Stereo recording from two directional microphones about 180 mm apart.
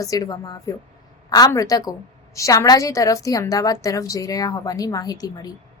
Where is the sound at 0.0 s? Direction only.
20° left (ahead or behind).